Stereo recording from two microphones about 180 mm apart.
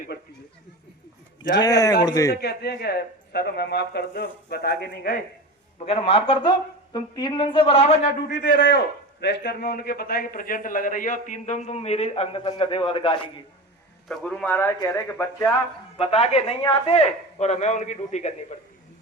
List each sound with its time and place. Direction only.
2.0 s a man's voice: 20° left (ahead or behind)
2.3 s speech: 65° left (ahead or behind)
5.8 s a man's voice: 30° left (ahead or behind)
8.4 s speech: 55° left (ahead or behind)
9.2 s a man's voice: 65° left (ahead or behind); by 13.1 s 30° left (ahead or behind)
14.1 s speech: 5° left (ahead or behind)
16.0 s a man's voice: 30° left (ahead or behind)